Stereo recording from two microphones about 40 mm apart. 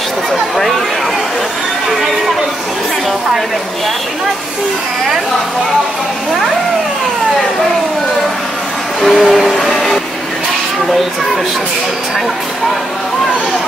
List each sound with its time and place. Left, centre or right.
0.3 s speech: centre
9.0 s a sound: centre
9.7 s vehicle: centre